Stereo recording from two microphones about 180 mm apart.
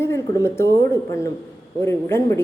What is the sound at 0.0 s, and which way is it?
A woman's voice, 15° left (ahead or behind).